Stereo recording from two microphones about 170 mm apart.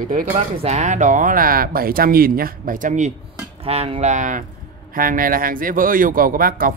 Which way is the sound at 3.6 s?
35° right (ahead or behind).